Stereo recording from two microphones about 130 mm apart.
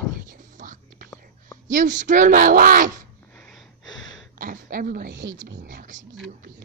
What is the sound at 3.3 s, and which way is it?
Wheeze, 5° left (ahead or behind).